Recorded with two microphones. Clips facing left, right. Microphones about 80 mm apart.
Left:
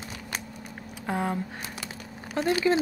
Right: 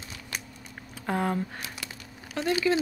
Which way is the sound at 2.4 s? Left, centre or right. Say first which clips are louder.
Left 3 dB; left.